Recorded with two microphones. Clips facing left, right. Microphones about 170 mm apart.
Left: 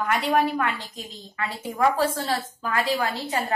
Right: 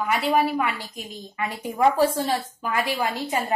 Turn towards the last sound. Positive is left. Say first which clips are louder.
# right 1 dB
turn(degrees=-10)  # may be behind; listen again after turning